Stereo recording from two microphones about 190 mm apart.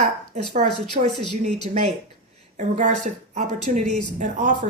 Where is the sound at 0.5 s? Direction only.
35° right (ahead or behind).